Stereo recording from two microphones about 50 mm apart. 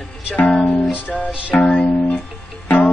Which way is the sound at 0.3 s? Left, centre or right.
Left.